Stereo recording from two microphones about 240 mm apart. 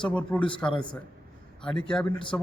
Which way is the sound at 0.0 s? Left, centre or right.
Centre.